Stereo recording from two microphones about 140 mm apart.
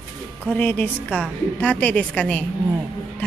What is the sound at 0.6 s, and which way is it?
A man's voice, 10° left (ahead or behind).